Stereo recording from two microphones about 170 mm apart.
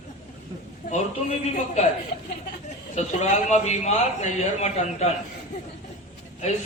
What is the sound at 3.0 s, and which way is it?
A man's voice, 40° left (ahead or behind).